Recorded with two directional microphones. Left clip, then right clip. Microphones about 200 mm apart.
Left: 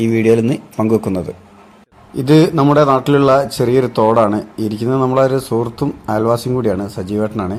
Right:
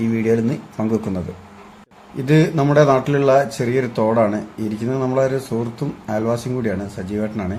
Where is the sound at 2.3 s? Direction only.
35° left (ahead or behind).